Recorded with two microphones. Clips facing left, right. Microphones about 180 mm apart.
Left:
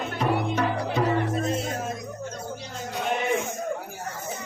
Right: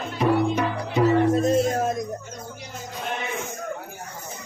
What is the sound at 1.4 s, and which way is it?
Music, 45° right (ahead or behind).